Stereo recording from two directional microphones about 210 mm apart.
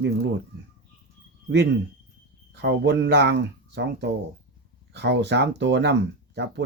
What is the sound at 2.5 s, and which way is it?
Speech, 55° right (ahead or behind).